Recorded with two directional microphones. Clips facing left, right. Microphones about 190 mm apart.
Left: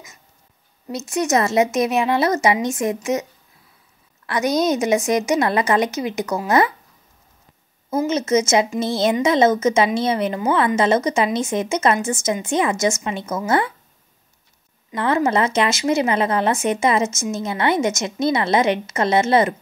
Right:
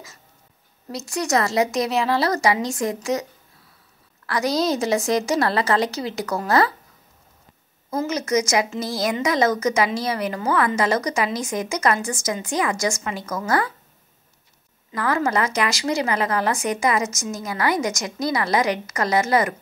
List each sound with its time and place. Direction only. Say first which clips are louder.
0.8 s a woman's voice: left 4 dB; 20° left (ahead or behind)
4.3 s a woman's voice: left 3 dB; 20° left (ahead or behind)
8.1 s a woman's voice: left 4 dB; 25° left (ahead or behind)
14.9 s a woman's voice: left 3 dB; 25° left (ahead or behind)